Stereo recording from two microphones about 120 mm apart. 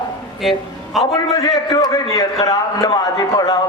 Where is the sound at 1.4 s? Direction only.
35° left (ahead or behind).